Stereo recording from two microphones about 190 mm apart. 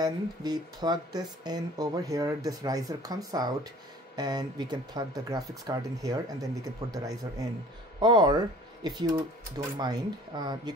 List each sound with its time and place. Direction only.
0.0 s speech: 20° right (ahead or behind)